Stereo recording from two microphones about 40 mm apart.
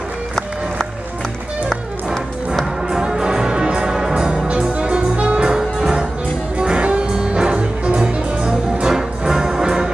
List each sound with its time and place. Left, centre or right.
2.9 s music: centre